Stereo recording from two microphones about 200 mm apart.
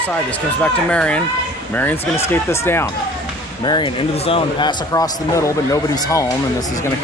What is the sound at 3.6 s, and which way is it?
A man's voice, 25° left (ahead or behind).